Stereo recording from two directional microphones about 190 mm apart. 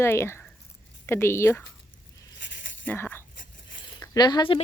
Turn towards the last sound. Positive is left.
turn(degrees=25)  # may be behind; listen again after turning